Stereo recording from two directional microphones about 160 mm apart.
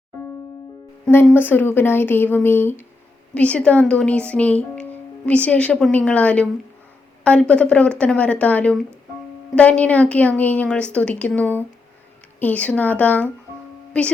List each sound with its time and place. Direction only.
1.0 s a woman's voice: 10° left (ahead or behind)